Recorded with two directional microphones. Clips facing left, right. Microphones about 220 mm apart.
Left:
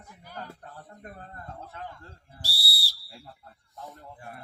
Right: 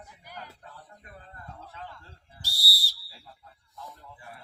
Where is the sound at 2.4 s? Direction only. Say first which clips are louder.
Left 1 dB; 35° left (ahead or behind).